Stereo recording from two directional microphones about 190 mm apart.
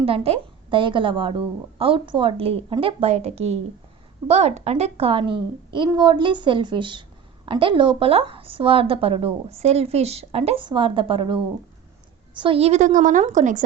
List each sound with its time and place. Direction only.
0.0 s a woman's voice: 30° right (ahead or behind)
12.4 s a woman's voice: 30° right (ahead or behind)